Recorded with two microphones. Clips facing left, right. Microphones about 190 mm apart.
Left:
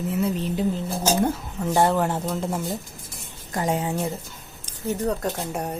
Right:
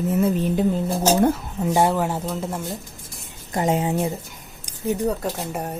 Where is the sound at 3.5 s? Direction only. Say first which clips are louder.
Right 3 dB; 20° right (ahead or behind); by 5.7 s 5° right (ahead or behind).